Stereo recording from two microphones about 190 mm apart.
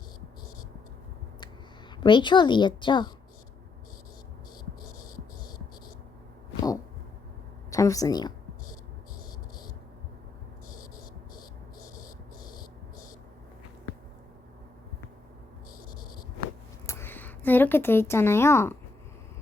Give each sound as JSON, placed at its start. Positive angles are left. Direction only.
{"t": 2.0, "sound": "a woman's voice", "side_deg": 25}
{"t": 7.7, "sound": "speech", "side_deg": 15}
{"t": 16.8, "sound": "a sound", "side_deg": 15}